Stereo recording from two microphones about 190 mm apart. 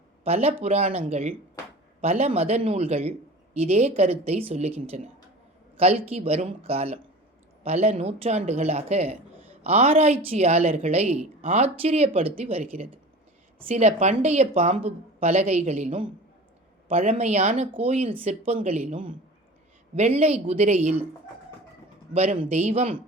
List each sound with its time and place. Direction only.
0.3 s a woman's voice: 30° right (ahead or behind)
13.7 s a woman's voice: 35° right (ahead or behind)
22.1 s a woman's voice: 40° right (ahead or behind)